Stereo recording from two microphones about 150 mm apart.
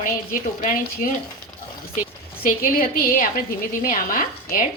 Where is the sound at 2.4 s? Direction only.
70° left (ahead or behind).